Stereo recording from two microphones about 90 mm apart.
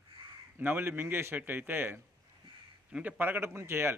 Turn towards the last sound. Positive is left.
turn(degrees=-25)  # may be behind; listen again after turning